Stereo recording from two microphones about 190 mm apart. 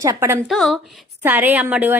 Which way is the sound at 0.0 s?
15° right (ahead or behind).